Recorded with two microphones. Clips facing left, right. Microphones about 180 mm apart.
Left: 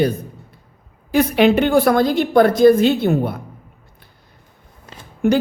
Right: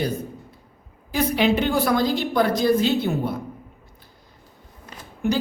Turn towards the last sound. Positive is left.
turn(degrees=50)  # may be behind; listen again after turning